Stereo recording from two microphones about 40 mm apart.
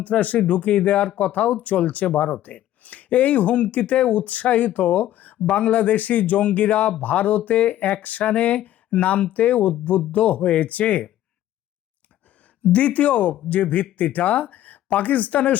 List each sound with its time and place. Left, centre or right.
0.0 s speech: left
5.5 s speech: left
12.6 s speech: left